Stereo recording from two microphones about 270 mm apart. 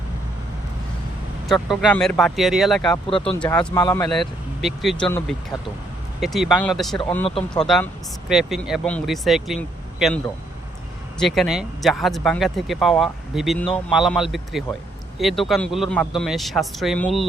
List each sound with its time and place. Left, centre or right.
1.5 s speech: centre
2.9 s speech: centre
3.3 s speech: centre
4.1 s speech: centre
7.3 s speech: left
7.6 s speech: centre
11.2 s speech: centre